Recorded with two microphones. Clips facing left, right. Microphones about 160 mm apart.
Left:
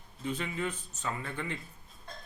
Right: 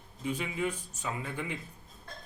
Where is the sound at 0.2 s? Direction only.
10° right (ahead or behind).